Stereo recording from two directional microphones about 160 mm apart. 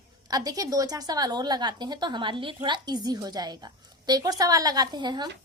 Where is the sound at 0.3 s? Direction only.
25° right (ahead or behind).